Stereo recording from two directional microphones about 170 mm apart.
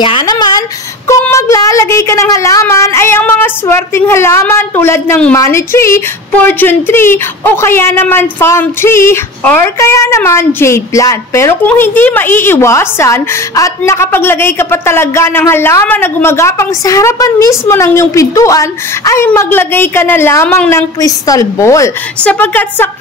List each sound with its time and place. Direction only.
0.0 s a woman's voice: 30° left (ahead or behind); by 22.8 s 10° left (ahead or behind)